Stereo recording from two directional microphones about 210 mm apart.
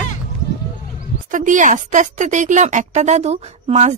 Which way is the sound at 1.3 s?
35° right (ahead or behind).